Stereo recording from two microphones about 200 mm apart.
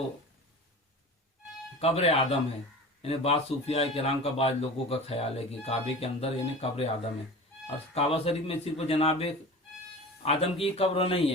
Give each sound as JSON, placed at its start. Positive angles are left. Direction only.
{"t": 1.8, "sound": "a man's voice", "side_deg": 30}
{"t": 7.9, "sound": "a man's voice", "side_deg": 30}